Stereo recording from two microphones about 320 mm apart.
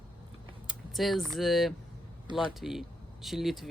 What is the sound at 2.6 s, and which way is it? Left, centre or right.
Speech, centre.